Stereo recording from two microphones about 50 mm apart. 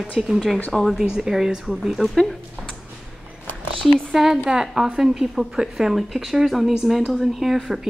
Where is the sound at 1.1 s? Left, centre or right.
Centre.